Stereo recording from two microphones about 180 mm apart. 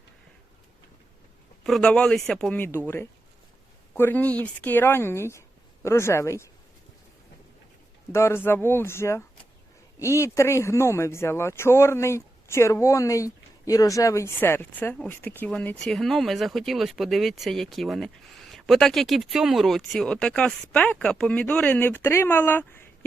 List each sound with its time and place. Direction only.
1.6 s speech: 5° left (ahead or behind)
8.1 s speech: 15° left (ahead or behind)